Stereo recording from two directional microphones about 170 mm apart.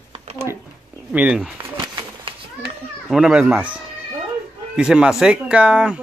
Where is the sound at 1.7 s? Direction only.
30° right (ahead or behind).